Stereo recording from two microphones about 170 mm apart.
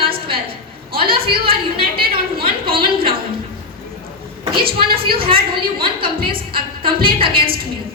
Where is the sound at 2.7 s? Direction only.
30° right (ahead or behind).